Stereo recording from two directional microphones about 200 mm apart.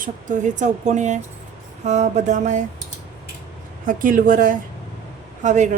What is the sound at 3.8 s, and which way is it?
Speech, 40° right (ahead or behind).